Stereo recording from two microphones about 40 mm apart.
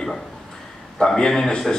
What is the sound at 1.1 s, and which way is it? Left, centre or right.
Speech, centre.